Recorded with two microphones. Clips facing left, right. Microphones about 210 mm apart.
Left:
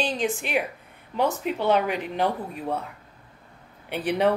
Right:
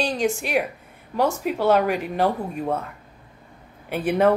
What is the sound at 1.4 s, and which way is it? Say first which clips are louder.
Speech: right 5 dB; 5° right (ahead or behind).